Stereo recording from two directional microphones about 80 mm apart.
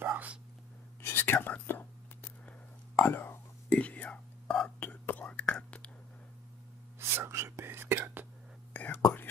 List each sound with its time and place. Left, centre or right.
0.0 s whispering: right
1.0 s whispering: left
7.0 s whispering: right
8.7 s whispering: left